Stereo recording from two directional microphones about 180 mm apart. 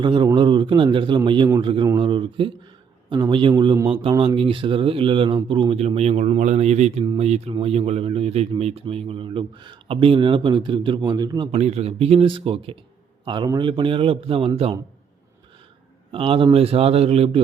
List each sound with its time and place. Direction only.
0.0 s speech: 25° right (ahead or behind)
11.5 s speech: 35° right (ahead or behind)
16.1 s speech: 30° right (ahead or behind)